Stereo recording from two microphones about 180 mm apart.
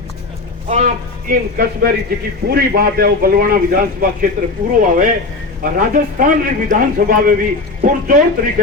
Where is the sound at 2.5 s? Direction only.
60° right (ahead or behind).